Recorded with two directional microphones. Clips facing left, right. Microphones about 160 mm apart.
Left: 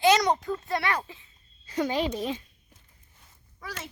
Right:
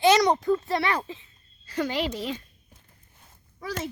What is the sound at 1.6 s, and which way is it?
Speech, 15° left (ahead or behind).